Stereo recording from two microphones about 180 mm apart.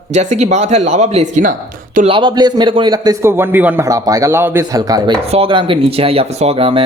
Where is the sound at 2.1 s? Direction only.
25° right (ahead or behind).